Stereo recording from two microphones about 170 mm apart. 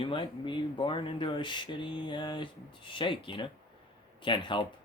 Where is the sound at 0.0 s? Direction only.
30° left (ahead or behind).